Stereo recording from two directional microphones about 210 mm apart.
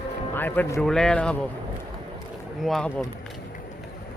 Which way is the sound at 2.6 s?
Centre (ahead or behind).